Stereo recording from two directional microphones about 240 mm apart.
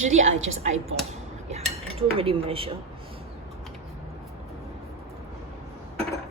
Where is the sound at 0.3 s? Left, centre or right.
Right.